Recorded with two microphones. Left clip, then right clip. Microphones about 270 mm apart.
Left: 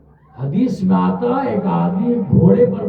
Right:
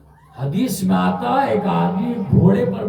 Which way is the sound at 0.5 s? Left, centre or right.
Centre.